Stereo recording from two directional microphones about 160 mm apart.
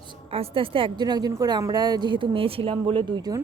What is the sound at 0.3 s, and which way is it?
A woman's voice, 35° right (ahead or behind).